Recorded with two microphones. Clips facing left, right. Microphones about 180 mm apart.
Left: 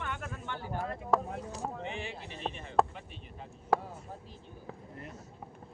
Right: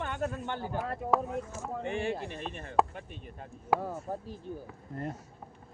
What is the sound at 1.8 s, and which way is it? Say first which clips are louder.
Speech: right 7 dB; 50° right (ahead or behind).